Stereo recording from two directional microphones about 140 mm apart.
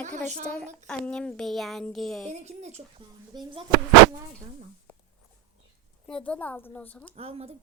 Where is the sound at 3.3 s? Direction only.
35° right (ahead or behind).